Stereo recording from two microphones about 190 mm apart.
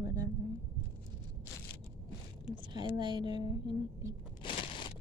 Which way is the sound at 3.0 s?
25° right (ahead or behind).